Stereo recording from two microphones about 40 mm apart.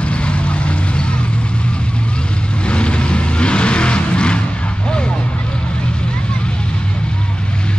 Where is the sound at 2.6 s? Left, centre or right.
Left.